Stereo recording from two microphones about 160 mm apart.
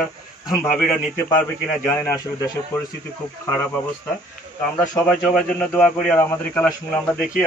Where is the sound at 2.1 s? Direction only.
20° left (ahead or behind).